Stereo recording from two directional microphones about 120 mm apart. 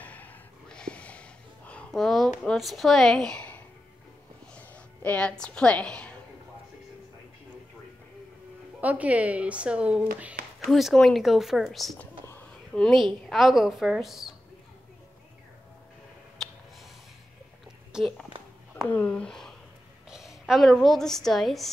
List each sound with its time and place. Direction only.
0.0 s a sound: 15° left (ahead or behind)
2.4 s a woman's voice: centre (ahead or behind)
8.8 s speech: 10° right (ahead or behind)
16.4 s a sound: 5° left (ahead or behind)
17.9 s speech: centre (ahead or behind)
18.9 s a woman's voice: 10° left (ahead or behind)